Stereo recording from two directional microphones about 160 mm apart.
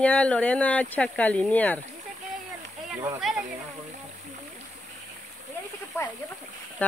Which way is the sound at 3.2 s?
Centre (ahead or behind).